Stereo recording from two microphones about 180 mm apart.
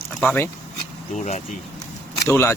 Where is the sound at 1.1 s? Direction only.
40° left (ahead or behind).